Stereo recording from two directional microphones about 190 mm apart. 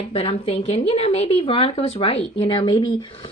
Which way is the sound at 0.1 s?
30° left (ahead or behind).